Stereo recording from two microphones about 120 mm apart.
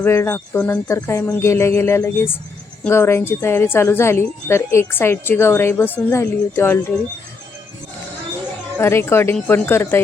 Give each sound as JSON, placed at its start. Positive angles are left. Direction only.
{"t": 0.0, "sound": "speech", "side_deg": 20}
{"t": 8.8, "sound": "speech", "side_deg": 20}